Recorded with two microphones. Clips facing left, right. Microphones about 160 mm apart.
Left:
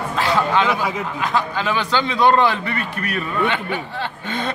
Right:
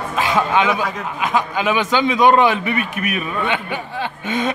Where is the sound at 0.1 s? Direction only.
15° right (ahead or behind).